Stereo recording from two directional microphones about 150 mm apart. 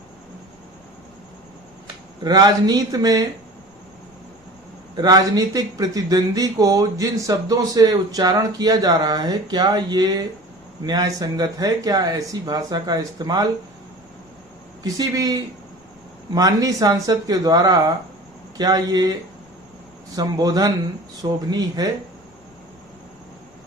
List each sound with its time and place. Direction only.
2.2 s speech: 25° right (ahead or behind)
4.9 s speech: 25° right (ahead or behind)
14.8 s speech: 25° right (ahead or behind)
20.1 s speech: 25° right (ahead or behind)